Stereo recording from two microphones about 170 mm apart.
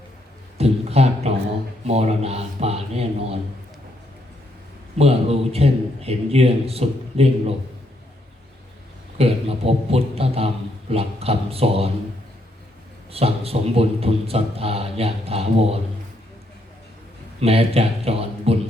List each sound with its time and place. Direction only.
0.6 s a man's voice: 40° right (ahead or behind)
4.9 s a man's voice: 35° right (ahead or behind)
9.1 s a man's voice: 35° right (ahead or behind)
13.1 s a man's voice: 35° right (ahead or behind)
17.4 s a man's voice: 35° right (ahead or behind)